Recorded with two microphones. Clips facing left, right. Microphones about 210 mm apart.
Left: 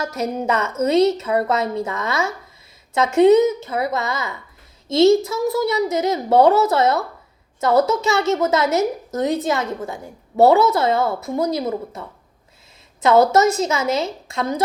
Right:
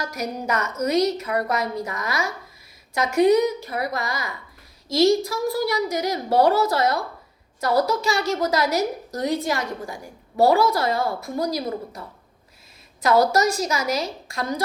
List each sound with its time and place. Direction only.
0.0 s a woman's voice: 25° left (ahead or behind)
13.0 s a woman's voice: 25° left (ahead or behind)